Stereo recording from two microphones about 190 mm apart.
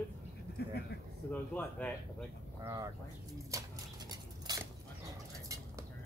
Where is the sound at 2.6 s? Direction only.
20° right (ahead or behind).